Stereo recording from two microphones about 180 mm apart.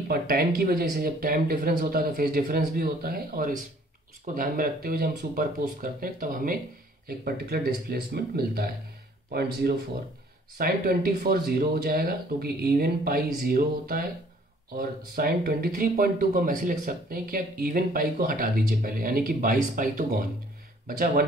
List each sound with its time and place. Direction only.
0.1 s speech: 55° right (ahead or behind)